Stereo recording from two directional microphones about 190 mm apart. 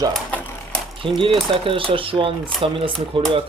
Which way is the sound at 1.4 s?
30° right (ahead or behind).